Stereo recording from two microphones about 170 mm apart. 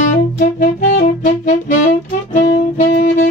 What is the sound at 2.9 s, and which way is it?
Saxophone, 65° left (ahead or behind).